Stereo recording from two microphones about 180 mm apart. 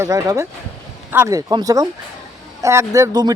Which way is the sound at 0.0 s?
20° right (ahead or behind).